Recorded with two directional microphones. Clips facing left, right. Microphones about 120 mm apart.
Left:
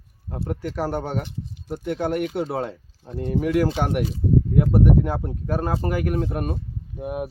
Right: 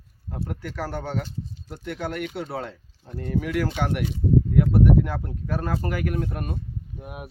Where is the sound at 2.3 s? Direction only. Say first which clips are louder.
Left 6 dB; 45° left (ahead or behind).